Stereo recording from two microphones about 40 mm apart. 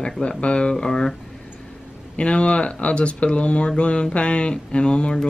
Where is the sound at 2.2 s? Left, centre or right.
Left.